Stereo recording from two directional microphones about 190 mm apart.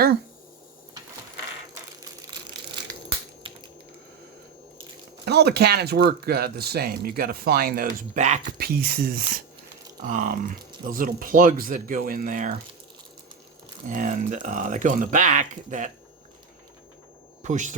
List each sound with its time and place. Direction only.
5.2 s speech: 60° right (ahead or behind); by 8.5 s 40° right (ahead or behind)
8.5 s speech: 50° right (ahead or behind)
13.8 s speech: 45° right (ahead or behind)
17.4 s speech: 40° right (ahead or behind)